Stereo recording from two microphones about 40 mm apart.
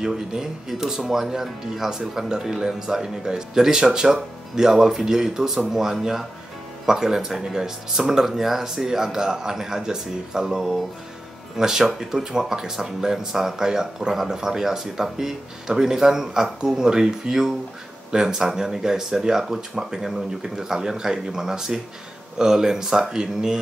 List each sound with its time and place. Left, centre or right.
0.0 s speech: centre